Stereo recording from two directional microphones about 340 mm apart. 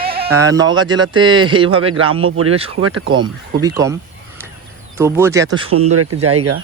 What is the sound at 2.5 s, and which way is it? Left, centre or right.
Speech, centre.